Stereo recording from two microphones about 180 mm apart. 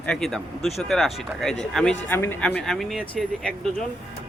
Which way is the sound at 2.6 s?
Centre (ahead or behind).